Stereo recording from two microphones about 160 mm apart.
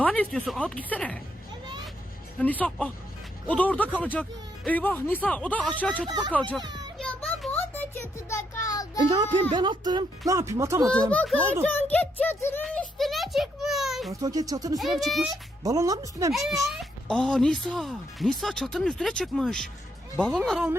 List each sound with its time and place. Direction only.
0.0 s speech: 5° left (ahead or behind)
2.4 s speech: 10° left (ahead or behind)
6.6 s children playing: 25° right (ahead or behind)
7.0 s music: 5° left (ahead or behind); by 9.0 s 25° left (ahead or behind)
9.0 s speech: 30° right (ahead or behind)
11.1 s speech: 10° left (ahead or behind)
13.0 s a child's voice: centre (ahead or behind)
14.1 s speech: 25° right (ahead or behind)
14.8 s speech: centre (ahead or behind)
15.6 s speech: 20° right (ahead or behind)
16.7 s speech: 5° left (ahead or behind)